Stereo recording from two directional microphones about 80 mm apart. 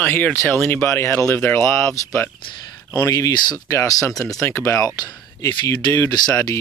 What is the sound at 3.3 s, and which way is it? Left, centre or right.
Speech, left.